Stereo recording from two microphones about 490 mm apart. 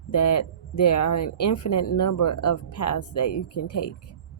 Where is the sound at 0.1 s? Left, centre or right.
Left.